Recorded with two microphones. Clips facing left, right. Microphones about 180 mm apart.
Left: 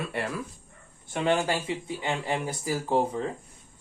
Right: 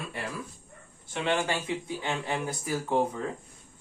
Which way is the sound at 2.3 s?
30° left (ahead or behind).